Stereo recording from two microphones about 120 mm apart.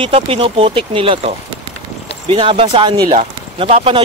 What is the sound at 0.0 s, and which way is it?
Speech, 50° right (ahead or behind).